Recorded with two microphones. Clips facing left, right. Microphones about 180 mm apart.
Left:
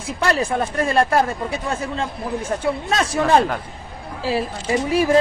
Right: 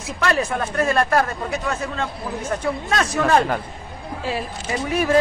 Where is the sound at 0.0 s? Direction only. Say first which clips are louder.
Left 1 dB; 30° left (ahead or behind).